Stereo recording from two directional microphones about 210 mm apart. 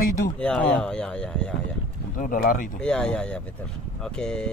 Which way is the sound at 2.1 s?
40° left (ahead or behind).